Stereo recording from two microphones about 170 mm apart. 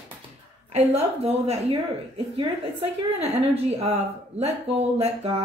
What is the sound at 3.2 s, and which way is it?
A woman's voice, 35° right (ahead or behind).